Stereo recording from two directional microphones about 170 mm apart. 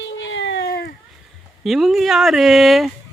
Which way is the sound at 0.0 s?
90° left.